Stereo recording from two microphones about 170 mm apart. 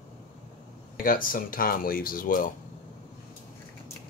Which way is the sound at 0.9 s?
55° left (ahead or behind).